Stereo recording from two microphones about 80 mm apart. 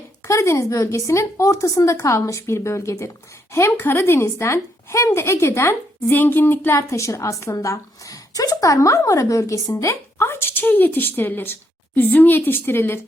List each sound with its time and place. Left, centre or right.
0.3 s a woman's voice: left